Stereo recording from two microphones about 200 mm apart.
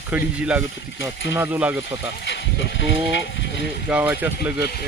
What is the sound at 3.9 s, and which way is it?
Speech, 10° right (ahead or behind).